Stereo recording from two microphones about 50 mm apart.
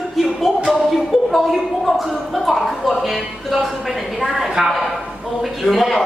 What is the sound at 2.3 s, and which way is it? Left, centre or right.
A man's voice, centre.